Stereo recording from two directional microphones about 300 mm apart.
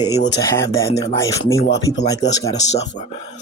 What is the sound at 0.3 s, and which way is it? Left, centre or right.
Speech, centre.